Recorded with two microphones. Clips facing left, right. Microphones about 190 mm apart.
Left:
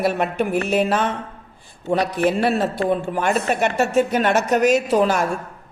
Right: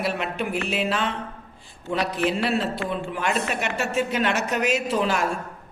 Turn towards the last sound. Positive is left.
turn(degrees=45)  # may be behind; listen again after turning